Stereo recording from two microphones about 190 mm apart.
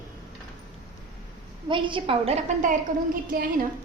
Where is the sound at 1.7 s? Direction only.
25° right (ahead or behind); by 3.5 s 50° right (ahead or behind).